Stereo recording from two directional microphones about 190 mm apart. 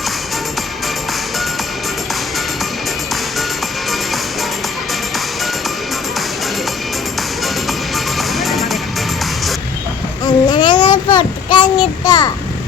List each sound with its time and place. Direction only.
7.9 s music: centre (ahead or behind)
10.2 s child singing: 25° left (ahead or behind)